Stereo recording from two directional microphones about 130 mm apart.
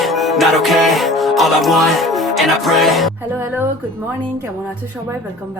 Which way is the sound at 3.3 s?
15° right (ahead or behind).